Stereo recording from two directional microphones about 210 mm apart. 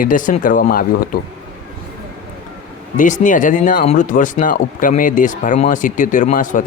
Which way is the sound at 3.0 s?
40° left (ahead or behind).